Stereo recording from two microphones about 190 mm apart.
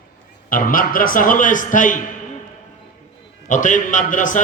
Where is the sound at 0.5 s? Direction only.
45° left (ahead or behind).